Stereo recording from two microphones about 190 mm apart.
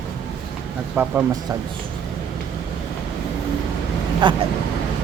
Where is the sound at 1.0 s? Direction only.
10° right (ahead or behind).